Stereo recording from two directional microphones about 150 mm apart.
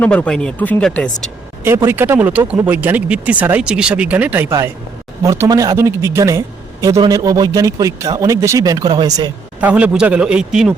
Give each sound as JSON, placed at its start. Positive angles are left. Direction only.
{"t": 0.0, "sound": "speech", "side_deg": 10}
{"t": 1.6, "sound": "speech", "side_deg": -15}
{"t": 9.6, "sound": "speech", "side_deg": -10}